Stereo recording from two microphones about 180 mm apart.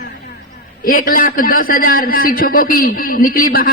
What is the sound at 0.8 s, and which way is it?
A man's voice, 50° left (ahead or behind).